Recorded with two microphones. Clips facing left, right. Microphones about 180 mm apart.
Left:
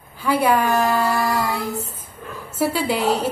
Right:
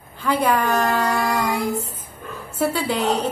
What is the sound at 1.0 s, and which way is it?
Child singing, centre (ahead or behind).